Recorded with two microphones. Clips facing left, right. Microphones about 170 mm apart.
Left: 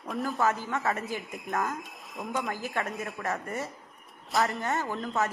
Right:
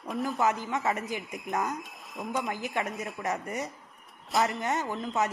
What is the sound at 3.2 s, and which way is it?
Speech, 15° right (ahead or behind).